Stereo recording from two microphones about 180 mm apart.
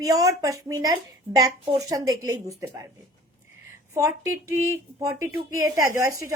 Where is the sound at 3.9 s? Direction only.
15° right (ahead or behind).